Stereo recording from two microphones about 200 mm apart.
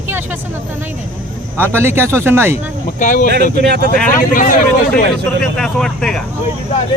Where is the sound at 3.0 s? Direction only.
40° left (ahead or behind).